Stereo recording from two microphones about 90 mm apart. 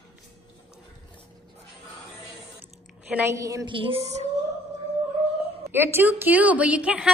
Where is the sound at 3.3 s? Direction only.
40° right (ahead or behind).